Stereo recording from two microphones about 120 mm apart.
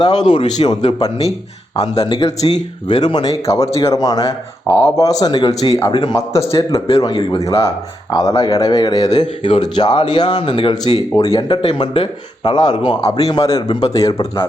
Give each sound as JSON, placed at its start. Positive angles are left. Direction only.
{"t": 0.0, "sound": "a man's voice", "side_deg": 35}
{"t": 2.6, "sound": "a man's voice", "side_deg": 35}
{"t": 3.4, "sound": "a man's voice", "side_deg": 25}
{"t": 6.1, "sound": "a man's voice", "side_deg": 25}